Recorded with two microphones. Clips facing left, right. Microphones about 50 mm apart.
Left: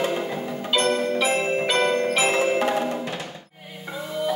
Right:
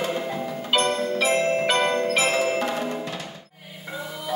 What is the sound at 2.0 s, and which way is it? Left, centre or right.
Music, left.